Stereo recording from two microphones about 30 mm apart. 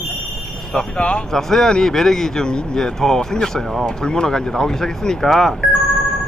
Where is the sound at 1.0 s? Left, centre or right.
Left.